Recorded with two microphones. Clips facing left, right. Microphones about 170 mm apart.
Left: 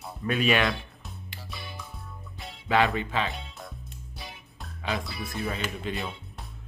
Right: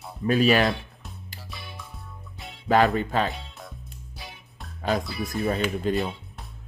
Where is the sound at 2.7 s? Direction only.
40° right (ahead or behind).